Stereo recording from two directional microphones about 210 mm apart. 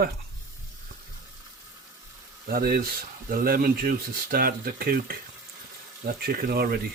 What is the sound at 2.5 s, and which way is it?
Speech, 45° right (ahead or behind).